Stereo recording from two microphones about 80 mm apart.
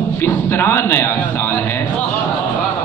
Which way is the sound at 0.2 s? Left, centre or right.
Left.